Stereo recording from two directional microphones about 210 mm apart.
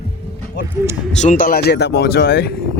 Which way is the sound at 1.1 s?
40° left (ahead or behind).